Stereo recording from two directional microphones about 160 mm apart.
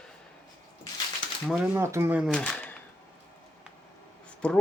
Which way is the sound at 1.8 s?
15° right (ahead or behind).